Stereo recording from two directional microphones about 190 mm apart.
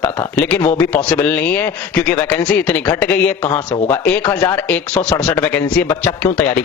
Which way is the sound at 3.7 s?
25° left (ahead or behind).